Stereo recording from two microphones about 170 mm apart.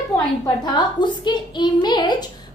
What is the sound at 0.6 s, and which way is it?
A woman's voice, 25° left (ahead or behind).